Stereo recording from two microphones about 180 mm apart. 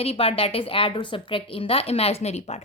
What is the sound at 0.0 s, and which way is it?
A woman's voice, 35° left (ahead or behind).